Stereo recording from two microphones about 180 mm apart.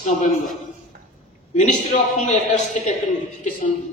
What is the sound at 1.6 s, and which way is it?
A man's voice, 40° left (ahead or behind).